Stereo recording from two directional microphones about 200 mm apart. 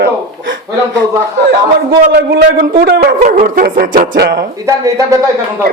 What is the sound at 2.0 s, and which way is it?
Speech, 55° right (ahead or behind).